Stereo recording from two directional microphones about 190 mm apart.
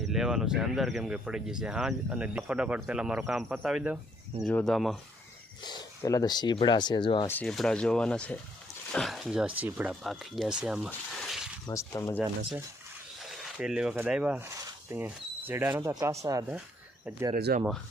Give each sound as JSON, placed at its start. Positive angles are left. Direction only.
{"t": 0.0, "sound": "speech", "side_deg": 0}
{"t": 5.6, "sound": "speech", "side_deg": 20}
{"t": 7.3, "sound": "speech", "side_deg": 5}
{"t": 11.7, "sound": "speech", "side_deg": 15}
{"t": 13.3, "sound": "speech", "side_deg": 0}
{"t": 17.3, "sound": "speech", "side_deg": -50}